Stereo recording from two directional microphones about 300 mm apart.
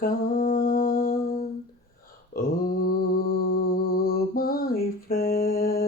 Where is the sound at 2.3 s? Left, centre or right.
Left.